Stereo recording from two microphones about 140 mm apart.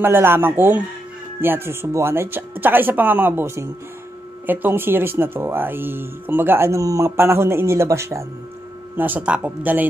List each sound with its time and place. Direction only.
0.0 s speech: 15° right (ahead or behind)